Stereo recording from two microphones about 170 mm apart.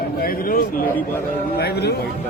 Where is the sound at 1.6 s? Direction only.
75° left (ahead or behind).